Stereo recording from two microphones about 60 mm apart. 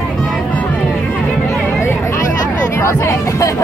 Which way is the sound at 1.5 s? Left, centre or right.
Left.